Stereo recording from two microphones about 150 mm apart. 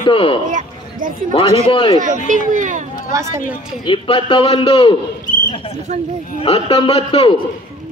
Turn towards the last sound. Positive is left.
turn(degrees=40)  # may be behind; listen again after turning